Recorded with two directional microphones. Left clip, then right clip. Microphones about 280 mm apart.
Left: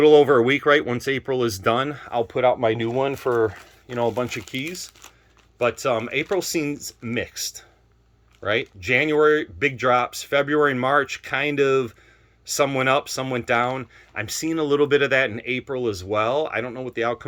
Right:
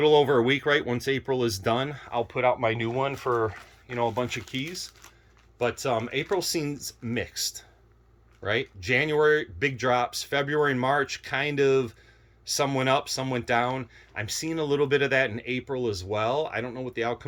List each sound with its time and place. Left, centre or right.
0.0 s speech: centre; by 3.6 s left
3.8 s speech: left